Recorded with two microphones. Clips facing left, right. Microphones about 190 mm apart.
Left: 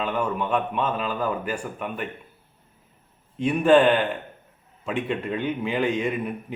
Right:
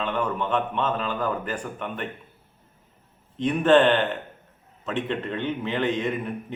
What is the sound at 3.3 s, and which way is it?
A man's voice, 10° left (ahead or behind).